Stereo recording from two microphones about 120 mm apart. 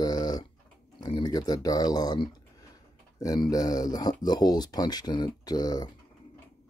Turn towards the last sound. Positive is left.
turn(degrees=35)  # may be behind; listen again after turning